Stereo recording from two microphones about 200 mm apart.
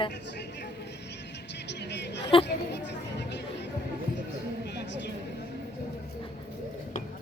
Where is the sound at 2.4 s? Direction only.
60° left (ahead or behind).